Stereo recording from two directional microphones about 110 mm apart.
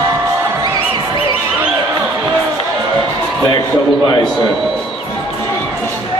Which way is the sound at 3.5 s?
40° left (ahead or behind).